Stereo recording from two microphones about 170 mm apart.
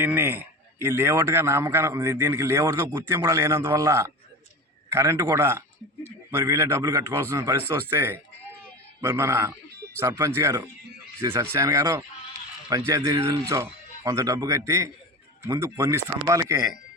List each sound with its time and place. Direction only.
0.0 s speech: 10° right (ahead or behind)